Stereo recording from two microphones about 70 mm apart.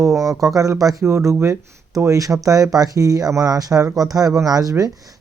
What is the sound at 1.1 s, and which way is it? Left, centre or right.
Speech, right.